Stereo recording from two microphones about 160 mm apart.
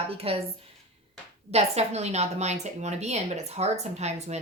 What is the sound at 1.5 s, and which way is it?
A woman's voice, 40° right (ahead or behind).